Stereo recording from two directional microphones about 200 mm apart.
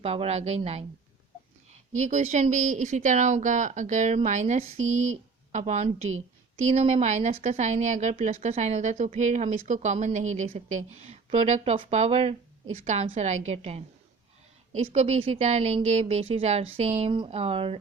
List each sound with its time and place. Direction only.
0.0 s speech: 30° right (ahead or behind)
2.0 s speech: 35° right (ahead or behind)
4.8 s speech: 90° right
5.1 s a woman's voice: 35° right (ahead or behind)